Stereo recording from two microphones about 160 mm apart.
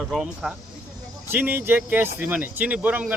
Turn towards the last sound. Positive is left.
turn(degrees=-5)  # may be behind; listen again after turning